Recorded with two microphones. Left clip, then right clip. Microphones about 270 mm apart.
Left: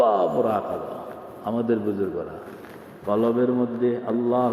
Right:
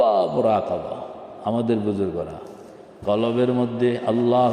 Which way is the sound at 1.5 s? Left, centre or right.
Right.